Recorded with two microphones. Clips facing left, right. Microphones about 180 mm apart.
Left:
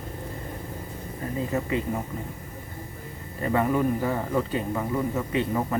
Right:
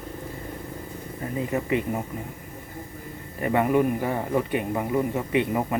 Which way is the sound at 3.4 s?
15° right (ahead or behind).